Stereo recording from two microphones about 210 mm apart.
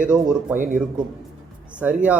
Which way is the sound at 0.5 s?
35° right (ahead or behind).